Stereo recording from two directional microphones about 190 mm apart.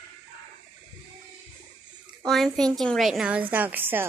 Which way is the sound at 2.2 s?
Centre (ahead or behind).